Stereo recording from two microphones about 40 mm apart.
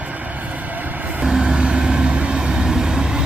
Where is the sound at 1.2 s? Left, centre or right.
Centre.